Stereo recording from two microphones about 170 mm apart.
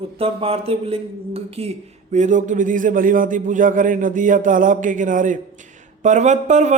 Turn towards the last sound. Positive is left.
turn(degrees=-45)  # may be behind; listen again after turning